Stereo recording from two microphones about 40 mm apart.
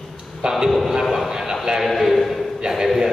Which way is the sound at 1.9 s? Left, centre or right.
Centre.